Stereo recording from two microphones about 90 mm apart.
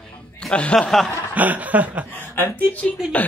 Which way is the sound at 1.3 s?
15° right (ahead or behind).